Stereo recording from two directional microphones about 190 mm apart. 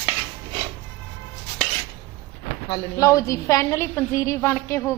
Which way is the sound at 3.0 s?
15° left (ahead or behind).